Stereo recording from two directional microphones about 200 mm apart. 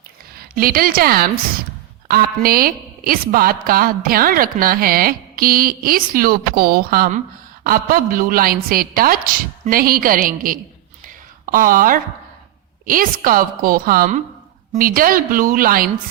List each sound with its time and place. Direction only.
0.3 s a woman's voice: 45° right (ahead or behind)